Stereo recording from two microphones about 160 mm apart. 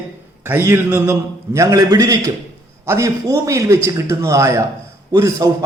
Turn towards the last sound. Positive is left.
turn(degrees=-20)  # may be behind; listen again after turning